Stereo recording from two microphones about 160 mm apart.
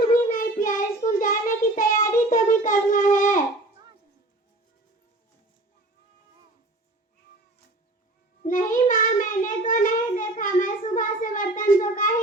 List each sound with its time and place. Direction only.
0.3 s child singing: 60° left (ahead or behind)
8.4 s child singing: 55° left (ahead or behind)